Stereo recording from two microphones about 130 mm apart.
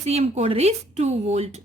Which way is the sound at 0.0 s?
55° right (ahead or behind).